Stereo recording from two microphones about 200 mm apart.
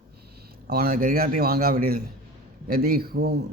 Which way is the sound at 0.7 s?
45° right (ahead or behind).